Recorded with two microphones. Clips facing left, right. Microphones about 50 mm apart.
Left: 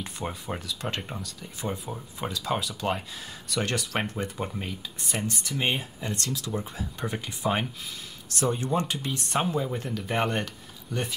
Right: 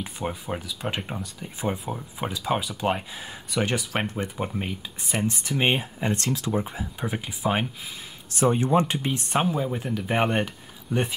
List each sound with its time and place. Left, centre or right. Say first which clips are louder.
0.0 s speech: right 3 dB; centre
4.6 s speech: right 4 dB; right
7.0 s speech: right 2 dB; centre
8.3 s speech: right 6 dB; right
9.3 s speech: right 2 dB; centre